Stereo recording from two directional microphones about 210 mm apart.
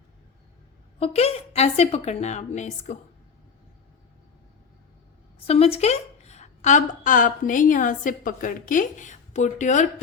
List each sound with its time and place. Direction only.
0.9 s a woman's voice: 30° left (ahead or behind)
5.5 s a woman's voice: 30° left (ahead or behind)